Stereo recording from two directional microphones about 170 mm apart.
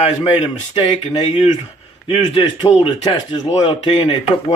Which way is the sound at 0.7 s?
30° left (ahead or behind).